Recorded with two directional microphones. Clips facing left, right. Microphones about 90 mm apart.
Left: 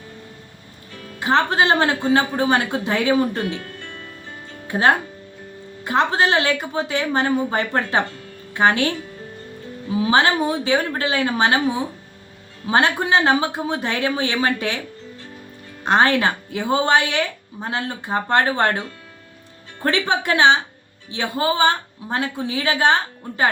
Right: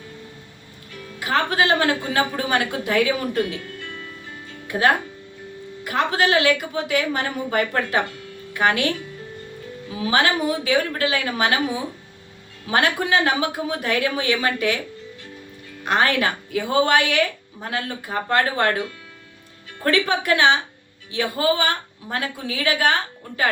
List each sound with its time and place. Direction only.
1.2 s speech: 25° left (ahead or behind)
4.7 s speech: 25° left (ahead or behind)
12.6 s speech: 30° left (ahead or behind)
15.8 s speech: 25° left (ahead or behind)